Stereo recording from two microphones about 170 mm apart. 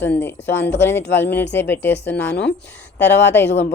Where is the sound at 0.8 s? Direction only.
15° left (ahead or behind).